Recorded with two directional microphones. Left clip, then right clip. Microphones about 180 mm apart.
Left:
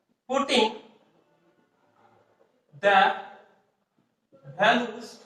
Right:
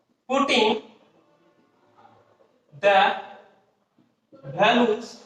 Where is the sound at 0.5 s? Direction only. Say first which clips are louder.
Right 3 dB; 50° right (ahead or behind).